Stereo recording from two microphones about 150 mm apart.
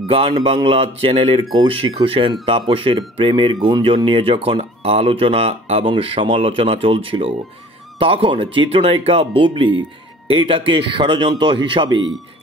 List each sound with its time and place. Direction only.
0.1 s speech: 35° right (ahead or behind)